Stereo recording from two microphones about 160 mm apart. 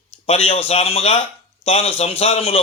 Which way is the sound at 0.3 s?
40° left (ahead or behind).